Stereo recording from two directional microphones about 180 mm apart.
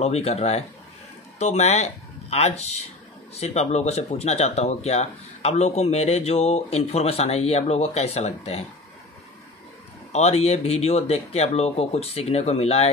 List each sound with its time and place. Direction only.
0.0 s speech: 35° left (ahead or behind)
10.1 s speech: 35° left (ahead or behind)